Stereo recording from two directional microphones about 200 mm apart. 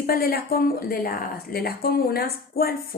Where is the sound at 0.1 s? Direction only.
50° left (ahead or behind).